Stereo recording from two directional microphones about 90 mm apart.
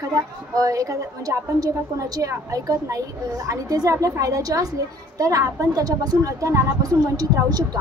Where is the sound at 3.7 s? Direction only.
40° right (ahead or behind).